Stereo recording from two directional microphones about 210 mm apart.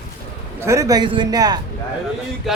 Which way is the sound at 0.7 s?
15° right (ahead or behind).